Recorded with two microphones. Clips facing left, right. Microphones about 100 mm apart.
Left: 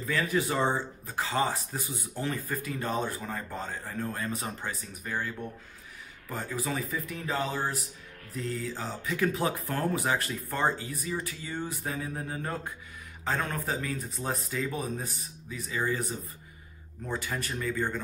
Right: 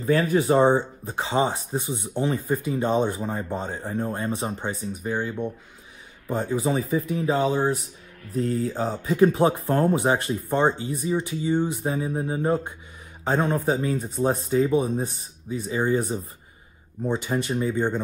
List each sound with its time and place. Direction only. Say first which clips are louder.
0.0 s speech: right 8 dB; 30° right (ahead or behind)